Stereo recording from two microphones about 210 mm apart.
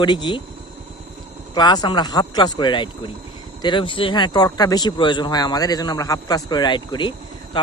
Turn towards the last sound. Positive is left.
turn(degrees=20)  # may be behind; listen again after turning